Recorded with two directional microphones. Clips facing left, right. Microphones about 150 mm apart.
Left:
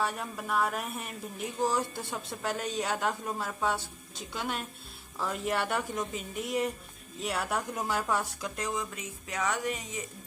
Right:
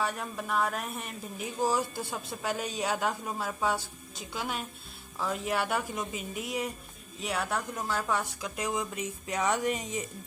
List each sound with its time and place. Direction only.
0.0 s a woman's voice: centre (ahead or behind)
7.8 s speech: 15° left (ahead or behind)
8.0 s speech: centre (ahead or behind); by 10.0 s 20° right (ahead or behind)